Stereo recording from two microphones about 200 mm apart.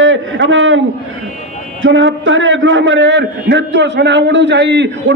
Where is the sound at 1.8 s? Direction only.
70° right (ahead or behind).